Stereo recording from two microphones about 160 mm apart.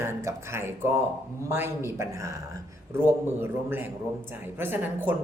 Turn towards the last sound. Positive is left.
turn(degrees=-10)  # may be behind; listen again after turning